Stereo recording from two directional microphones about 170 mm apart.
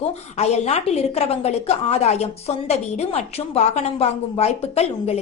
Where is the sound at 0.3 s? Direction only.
40° left (ahead or behind).